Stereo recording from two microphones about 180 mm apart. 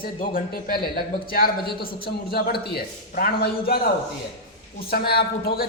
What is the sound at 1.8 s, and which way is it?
A man's voice, 60° left (ahead or behind).